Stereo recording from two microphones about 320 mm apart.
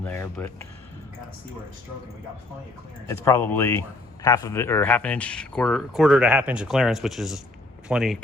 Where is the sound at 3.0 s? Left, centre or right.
Centre.